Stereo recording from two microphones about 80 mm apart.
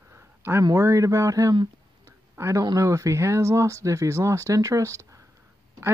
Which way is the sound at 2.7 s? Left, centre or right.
Right.